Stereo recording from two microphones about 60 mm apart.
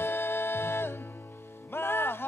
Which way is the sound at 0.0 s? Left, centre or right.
Left.